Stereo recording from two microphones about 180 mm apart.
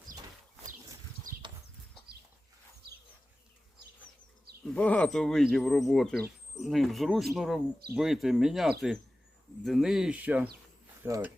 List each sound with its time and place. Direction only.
1.3 s clip-clop: 50° right (ahead or behind)
4.6 s speech: 5° left (ahead or behind); by 11.3 s 15° right (ahead or behind)